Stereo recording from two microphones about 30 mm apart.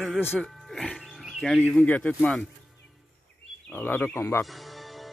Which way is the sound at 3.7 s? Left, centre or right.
Left.